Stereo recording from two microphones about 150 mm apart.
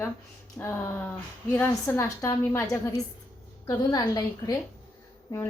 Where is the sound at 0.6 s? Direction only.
15° left (ahead or behind).